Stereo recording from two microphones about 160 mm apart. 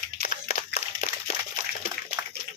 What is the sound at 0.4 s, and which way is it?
Crumpling, 45° left (ahead or behind).